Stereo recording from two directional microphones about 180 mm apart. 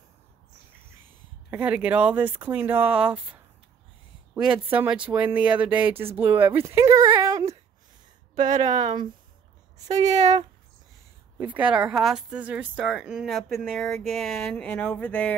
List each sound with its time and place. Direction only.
1.5 s speech: 10° right (ahead or behind)
4.5 s speech: 5° right (ahead or behind)
8.4 s speech: 45° right (ahead or behind)
8.6 s speech: 25° right (ahead or behind)
10.0 s speech: 40° right (ahead or behind)
11.3 s speech: 10° right (ahead or behind); by 15.3 s 5° left (ahead or behind)